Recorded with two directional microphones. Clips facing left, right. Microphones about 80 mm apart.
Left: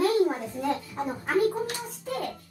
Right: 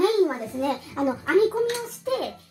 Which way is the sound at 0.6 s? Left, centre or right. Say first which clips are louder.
Right 5 dB; right.